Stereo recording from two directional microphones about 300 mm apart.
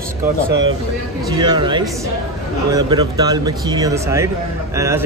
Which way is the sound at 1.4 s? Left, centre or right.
Centre.